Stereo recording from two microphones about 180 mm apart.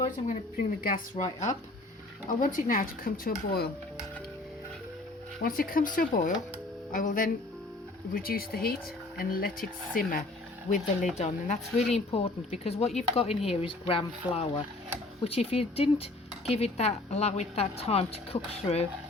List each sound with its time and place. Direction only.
0.3 s speech: 55° left (ahead or behind)
5.4 s speech: 55° left (ahead or behind)
10.7 s speech: 40° left (ahead or behind)